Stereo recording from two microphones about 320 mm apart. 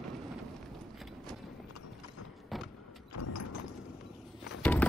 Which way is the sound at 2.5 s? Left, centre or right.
Centre.